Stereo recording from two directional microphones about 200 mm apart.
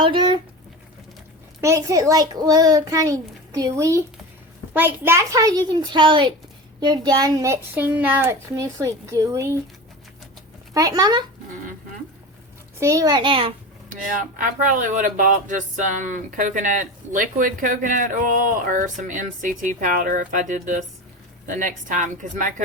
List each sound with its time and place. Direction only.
0.0 s a sound: 25° right (ahead or behind)
1.6 s a child's voice: 15° right (ahead or behind)
10.8 s a child's voice: 20° right (ahead or behind)
12.8 s a child's voice: 15° right (ahead or behind)
13.9 s speech: 40° right (ahead or behind)